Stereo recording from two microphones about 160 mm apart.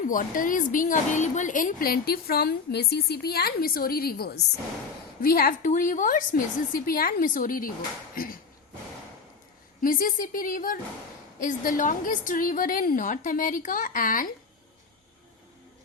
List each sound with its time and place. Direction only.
0.0 s a woman's voice: 55° left (ahead or behind); by 4.4 s 85° left
5.2 s a woman's voice: 70° left (ahead or behind)
8.1 s a sound: 65° left (ahead or behind)
9.8 s a woman's voice: 60° left (ahead or behind)